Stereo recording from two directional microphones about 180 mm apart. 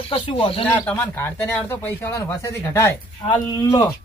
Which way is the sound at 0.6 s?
10° left (ahead or behind).